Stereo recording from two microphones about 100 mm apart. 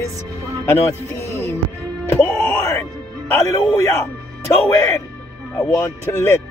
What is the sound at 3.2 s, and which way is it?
Speech, 25° left (ahead or behind).